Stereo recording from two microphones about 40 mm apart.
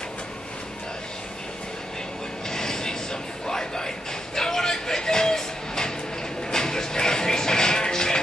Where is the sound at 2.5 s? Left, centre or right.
Centre.